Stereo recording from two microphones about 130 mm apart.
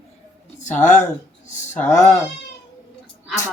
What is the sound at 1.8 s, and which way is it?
Speech, 25° left (ahead or behind).